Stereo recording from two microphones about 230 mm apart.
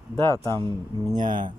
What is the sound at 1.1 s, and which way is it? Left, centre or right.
Speech, right.